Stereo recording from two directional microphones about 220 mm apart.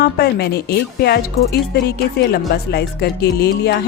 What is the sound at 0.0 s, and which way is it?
Speech, 45° left (ahead or behind).